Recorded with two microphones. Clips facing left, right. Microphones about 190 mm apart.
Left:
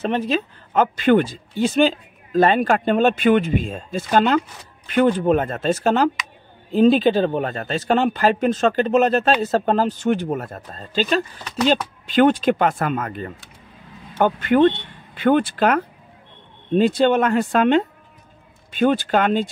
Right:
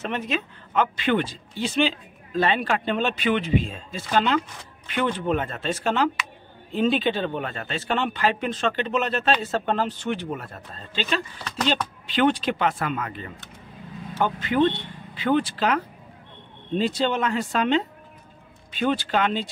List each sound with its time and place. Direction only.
0.0 s speech: 35° left (ahead or behind)
14.1 s speech: 55° left (ahead or behind)